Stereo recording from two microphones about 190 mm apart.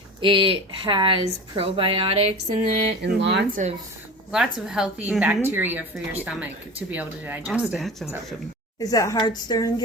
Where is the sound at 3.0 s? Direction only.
65° right (ahead or behind).